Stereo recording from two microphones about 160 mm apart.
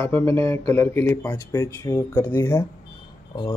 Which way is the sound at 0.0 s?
15° left (ahead or behind).